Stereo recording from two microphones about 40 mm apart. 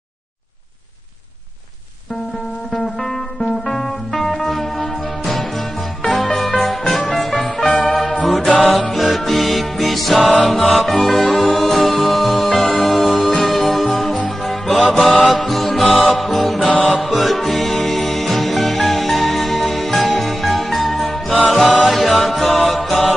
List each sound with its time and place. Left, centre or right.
2.7 s music: centre
7.4 s music: centre
8.5 s music: centre
8.9 s music: centre
11.2 s music: centre
11.6 s music: centre
21.3 s music: left
21.8 s music: centre